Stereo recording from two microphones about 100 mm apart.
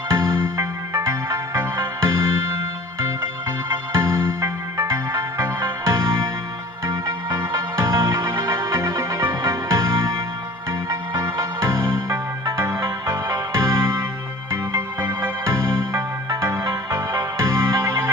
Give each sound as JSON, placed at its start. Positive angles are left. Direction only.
{"t": 0.1, "sound": "music", "side_deg": -35}
{"t": 3.7, "sound": "music", "side_deg": -30}